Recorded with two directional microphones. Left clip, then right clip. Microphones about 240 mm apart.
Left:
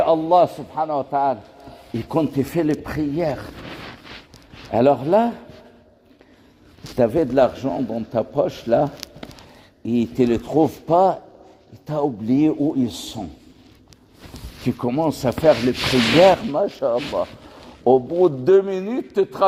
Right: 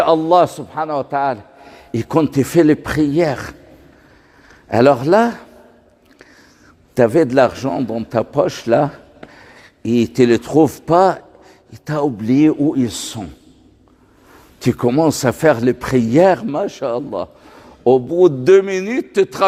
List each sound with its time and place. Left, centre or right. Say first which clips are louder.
0.0 s a man's voice: right 3 dB; right
4.7 s a man's voice: right 4 dB; right
6.9 s a man's voice: right 5 dB; right
14.6 s a man's voice: right 7 dB; right